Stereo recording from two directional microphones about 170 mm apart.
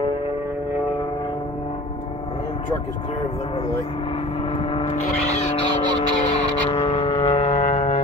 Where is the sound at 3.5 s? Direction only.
35° left (ahead or behind).